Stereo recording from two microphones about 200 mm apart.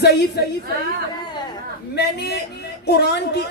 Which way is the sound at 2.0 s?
55° left (ahead or behind).